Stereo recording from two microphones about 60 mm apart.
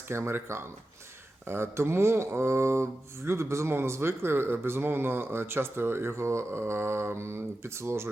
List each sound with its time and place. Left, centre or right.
0.1 s speech: right